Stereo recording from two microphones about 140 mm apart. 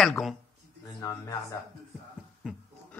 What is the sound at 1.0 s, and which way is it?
Speech, 25° left (ahead or behind).